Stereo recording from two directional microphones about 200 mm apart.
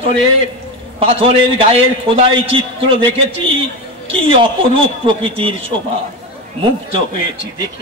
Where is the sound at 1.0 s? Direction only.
30° right (ahead or behind).